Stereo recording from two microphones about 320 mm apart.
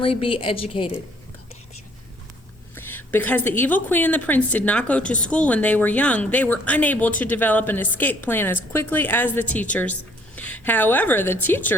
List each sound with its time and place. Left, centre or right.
0.0 s a woman's voice: centre
2.7 s a sound: centre
3.6 s a woman's voice: centre